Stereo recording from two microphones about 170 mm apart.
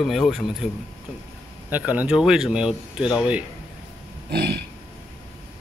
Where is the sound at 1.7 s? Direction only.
10° right (ahead or behind).